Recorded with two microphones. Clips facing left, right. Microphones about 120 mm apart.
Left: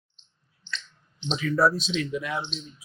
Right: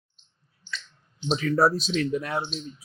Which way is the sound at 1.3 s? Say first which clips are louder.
Right 1 dB; 40° right (ahead or behind).